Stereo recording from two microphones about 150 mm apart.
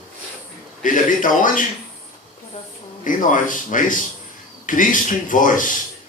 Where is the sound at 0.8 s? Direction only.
60° left (ahead or behind).